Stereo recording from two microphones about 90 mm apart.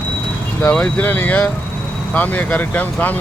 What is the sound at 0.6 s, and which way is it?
Speech, 15° left (ahead or behind).